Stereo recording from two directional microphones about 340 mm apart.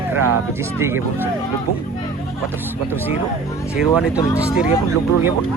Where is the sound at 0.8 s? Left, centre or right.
Centre.